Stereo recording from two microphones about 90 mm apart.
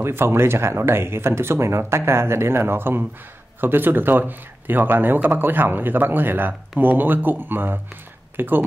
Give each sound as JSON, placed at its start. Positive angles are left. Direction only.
{"t": 0.0, "sound": "speech", "side_deg": -25}